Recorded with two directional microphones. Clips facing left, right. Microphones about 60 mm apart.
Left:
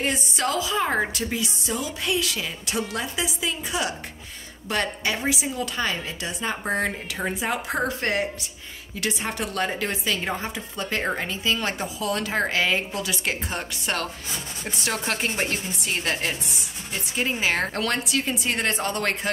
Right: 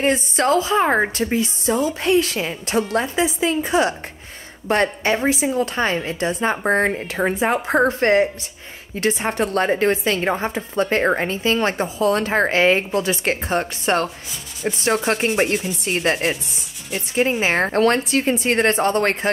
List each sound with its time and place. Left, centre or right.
0.0 s a woman's voice: right